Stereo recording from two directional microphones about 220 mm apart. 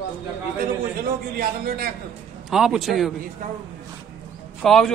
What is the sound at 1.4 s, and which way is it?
Speech, 45° right (ahead or behind).